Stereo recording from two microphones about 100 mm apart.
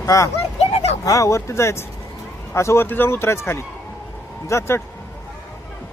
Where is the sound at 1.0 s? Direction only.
35° left (ahead or behind).